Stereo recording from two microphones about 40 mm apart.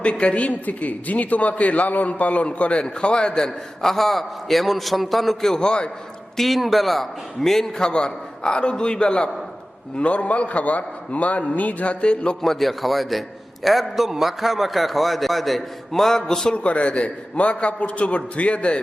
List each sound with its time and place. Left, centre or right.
0.0 s a man's voice: left
3.8 s a man's voice: centre; by 5.9 s left
6.3 s a man's voice: centre
7.9 s a man's voice: left
10.0 s a man's voice: left
12.0 s a man's voice: left
12.4 s a man's voice: centre
16.6 s a man's voice: left